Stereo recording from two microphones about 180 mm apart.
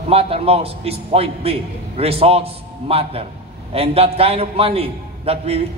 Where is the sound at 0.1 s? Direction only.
35° right (ahead or behind).